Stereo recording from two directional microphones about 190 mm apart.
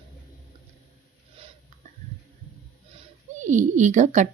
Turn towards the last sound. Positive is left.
turn(degrees=-40)  # may be behind; listen again after turning